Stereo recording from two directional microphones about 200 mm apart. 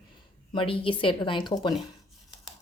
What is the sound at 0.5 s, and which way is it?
Speech, 25° left (ahead or behind).